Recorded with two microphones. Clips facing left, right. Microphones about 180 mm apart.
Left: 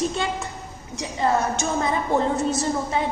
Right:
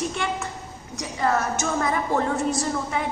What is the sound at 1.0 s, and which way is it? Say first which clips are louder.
A woman's voice: left 2 dB; 25° left (ahead or behind).